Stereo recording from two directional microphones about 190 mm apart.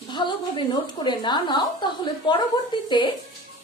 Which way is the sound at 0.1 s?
25° left (ahead or behind).